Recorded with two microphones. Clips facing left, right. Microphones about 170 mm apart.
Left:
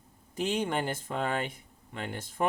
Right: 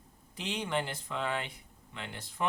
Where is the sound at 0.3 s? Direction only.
45° left (ahead or behind).